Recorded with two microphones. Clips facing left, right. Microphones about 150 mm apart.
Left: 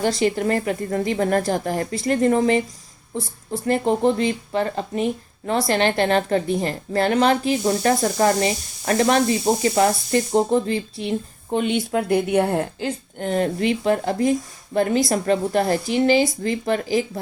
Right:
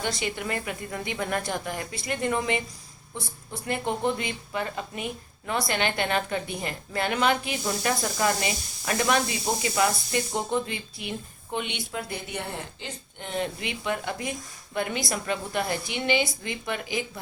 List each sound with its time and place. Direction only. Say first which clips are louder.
0.0 s speech: left 10 dB; 40° left (ahead or behind)
3.7 s speech: left 8 dB; 35° left (ahead or behind)
11.9 s speech: left 16 dB; 60° left (ahead or behind); by 17.1 s 35° left (ahead or behind)